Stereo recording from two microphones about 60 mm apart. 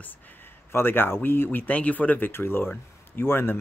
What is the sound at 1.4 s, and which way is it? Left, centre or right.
Speech, left.